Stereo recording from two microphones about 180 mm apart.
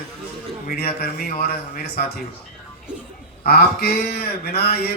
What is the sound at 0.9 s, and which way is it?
A man's voice, 55° left (ahead or behind).